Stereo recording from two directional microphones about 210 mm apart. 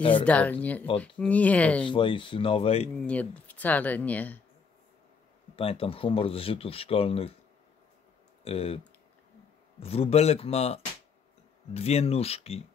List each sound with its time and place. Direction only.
0.1 s speech: 5° left (ahead or behind)
1.9 s speech: 25° left (ahead or behind)
3.0 s speech: 5° left (ahead or behind)
5.6 s speech: 25° left (ahead or behind)
8.5 s speech: 30° left (ahead or behind)